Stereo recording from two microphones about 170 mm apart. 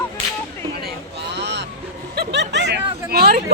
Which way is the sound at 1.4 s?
85° right.